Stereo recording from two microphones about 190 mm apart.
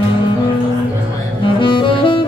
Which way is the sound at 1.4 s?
25° left (ahead or behind).